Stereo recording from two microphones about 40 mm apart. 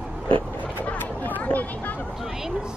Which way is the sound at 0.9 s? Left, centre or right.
Left.